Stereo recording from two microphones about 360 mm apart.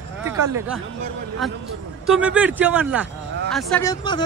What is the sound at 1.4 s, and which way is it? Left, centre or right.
Speech, centre.